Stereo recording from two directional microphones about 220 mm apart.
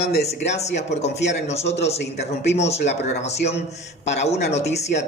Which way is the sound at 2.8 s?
50° left (ahead or behind).